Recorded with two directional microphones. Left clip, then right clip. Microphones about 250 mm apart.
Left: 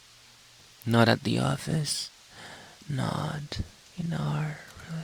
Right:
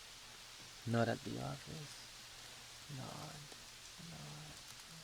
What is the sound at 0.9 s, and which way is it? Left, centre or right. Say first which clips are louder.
Speech: left 15 dB; left.